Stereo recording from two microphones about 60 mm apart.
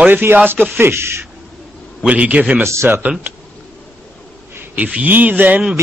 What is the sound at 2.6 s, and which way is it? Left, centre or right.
Speech, right.